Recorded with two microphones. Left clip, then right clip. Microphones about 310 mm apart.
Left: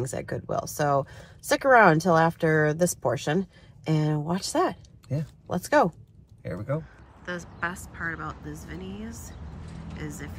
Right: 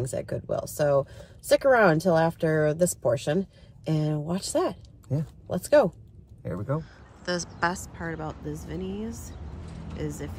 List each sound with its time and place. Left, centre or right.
0.0 s a woman's voice: centre